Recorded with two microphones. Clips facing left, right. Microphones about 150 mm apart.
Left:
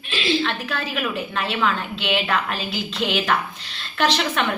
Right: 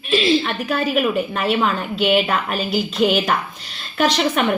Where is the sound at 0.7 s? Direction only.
45° right (ahead or behind).